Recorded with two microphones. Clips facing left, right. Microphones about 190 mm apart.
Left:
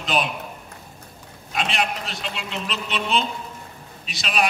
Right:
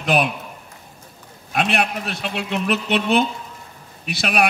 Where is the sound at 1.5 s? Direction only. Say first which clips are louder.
Right 4 dB; 60° right (ahead or behind).